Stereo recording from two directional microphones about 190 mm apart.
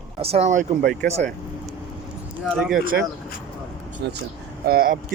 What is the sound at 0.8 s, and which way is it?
Speech, 60° right (ahead or behind).